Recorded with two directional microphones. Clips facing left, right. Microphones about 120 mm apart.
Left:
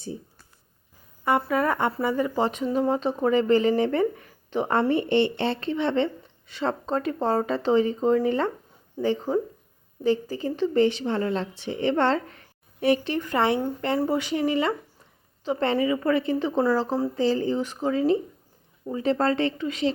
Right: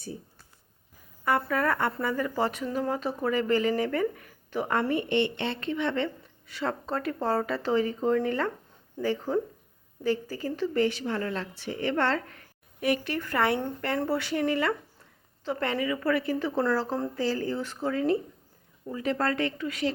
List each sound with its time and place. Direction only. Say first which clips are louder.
1.5 s a woman's voice: left 3 dB; 20° left (ahead or behind)